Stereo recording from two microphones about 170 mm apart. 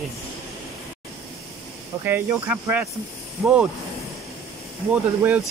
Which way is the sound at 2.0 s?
10° right (ahead or behind).